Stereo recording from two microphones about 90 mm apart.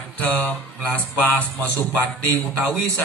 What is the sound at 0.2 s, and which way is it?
Speech, 15° left (ahead or behind).